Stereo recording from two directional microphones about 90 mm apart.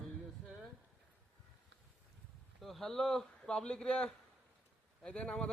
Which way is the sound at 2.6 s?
5° left (ahead or behind).